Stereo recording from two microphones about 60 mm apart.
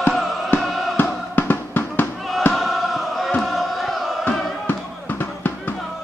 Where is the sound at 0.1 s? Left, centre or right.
Centre.